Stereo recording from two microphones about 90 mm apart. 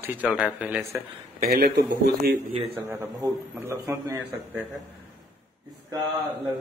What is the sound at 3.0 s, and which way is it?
A man's voice, 35° right (ahead or behind).